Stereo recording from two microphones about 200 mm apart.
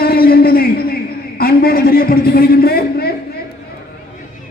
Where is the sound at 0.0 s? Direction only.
50° left (ahead or behind).